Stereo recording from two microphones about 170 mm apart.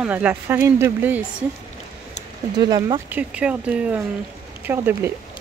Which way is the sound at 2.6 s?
25° right (ahead or behind).